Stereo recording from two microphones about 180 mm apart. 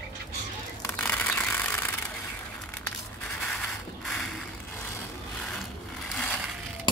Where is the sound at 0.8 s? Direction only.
10° left (ahead or behind).